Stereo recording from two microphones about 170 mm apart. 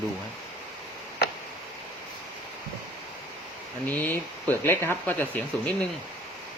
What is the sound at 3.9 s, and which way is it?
Speech, 10° left (ahead or behind).